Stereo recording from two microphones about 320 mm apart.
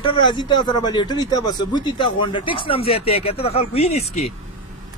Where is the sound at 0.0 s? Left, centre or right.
Centre.